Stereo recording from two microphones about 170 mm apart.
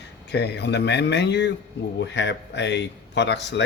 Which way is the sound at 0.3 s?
80° left.